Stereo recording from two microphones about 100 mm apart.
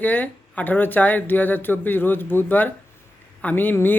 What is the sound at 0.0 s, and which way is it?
Speech, 15° left (ahead or behind).